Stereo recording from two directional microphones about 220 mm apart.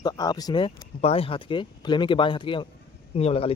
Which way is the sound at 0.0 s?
20° left (ahead or behind).